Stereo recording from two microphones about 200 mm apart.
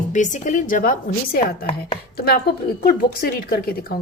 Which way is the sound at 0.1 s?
40° left (ahead or behind).